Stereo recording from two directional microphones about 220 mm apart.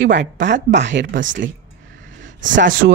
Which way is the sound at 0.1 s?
55° right (ahead or behind).